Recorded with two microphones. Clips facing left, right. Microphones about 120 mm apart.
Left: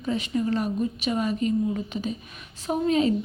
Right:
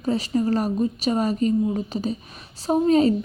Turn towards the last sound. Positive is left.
turn(degrees=-35)  # may be behind; listen again after turning